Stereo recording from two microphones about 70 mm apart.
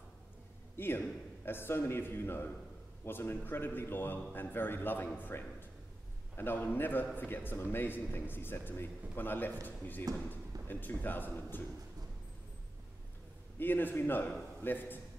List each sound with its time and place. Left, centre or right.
0.7 s a man's voice: left
13.6 s speech: left